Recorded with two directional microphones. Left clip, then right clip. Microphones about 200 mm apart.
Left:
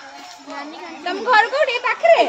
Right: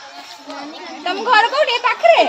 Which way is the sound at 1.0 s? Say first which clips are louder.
Right 2 dB; 55° right (ahead or behind).